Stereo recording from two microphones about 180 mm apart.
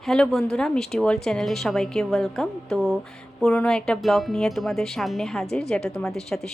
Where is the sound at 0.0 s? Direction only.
5° left (ahead or behind).